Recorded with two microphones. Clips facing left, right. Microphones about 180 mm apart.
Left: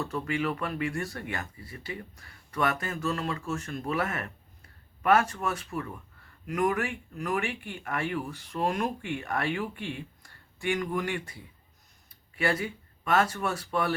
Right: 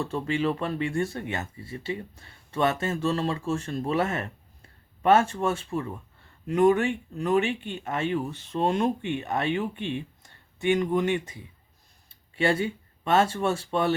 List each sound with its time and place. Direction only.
0.0 s speech: 25° right (ahead or behind)